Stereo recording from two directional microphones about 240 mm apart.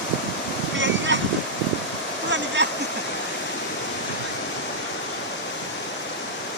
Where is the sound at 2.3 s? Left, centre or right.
Right.